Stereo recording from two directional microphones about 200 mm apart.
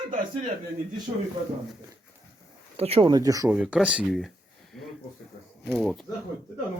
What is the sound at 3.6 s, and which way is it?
Speech, 5° right (ahead or behind).